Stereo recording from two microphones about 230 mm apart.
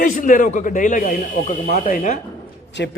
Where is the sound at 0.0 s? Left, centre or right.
Left.